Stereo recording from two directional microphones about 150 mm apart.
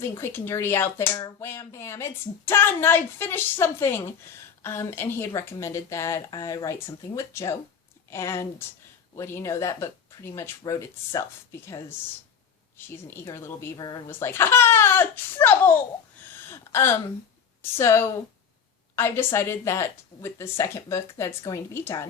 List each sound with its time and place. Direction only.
0.0 s speech: 15° left (ahead or behind)
16.3 s gasp: 15° left (ahead or behind)
17.6 s speech: 15° left (ahead or behind)